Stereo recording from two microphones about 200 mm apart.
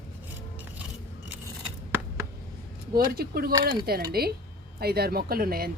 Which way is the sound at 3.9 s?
50° right (ahead or behind).